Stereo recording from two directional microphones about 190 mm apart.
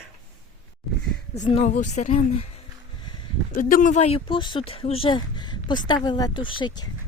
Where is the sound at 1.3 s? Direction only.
35° left (ahead or behind).